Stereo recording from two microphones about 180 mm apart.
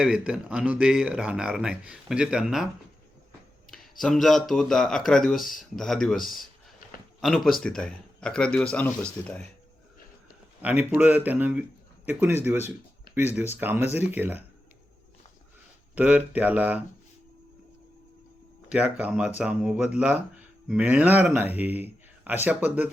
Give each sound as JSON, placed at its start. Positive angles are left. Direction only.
{"t": 0.0, "sound": "speech", "side_deg": -5}
{"t": 4.0, "sound": "speech", "side_deg": 0}
{"t": 10.6, "sound": "speech", "side_deg": -10}
{"t": 16.0, "sound": "speech", "side_deg": -10}
{"t": 18.7, "sound": "speech", "side_deg": -5}